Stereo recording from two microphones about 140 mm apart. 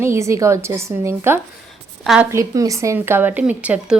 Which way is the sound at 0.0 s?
20° right (ahead or behind).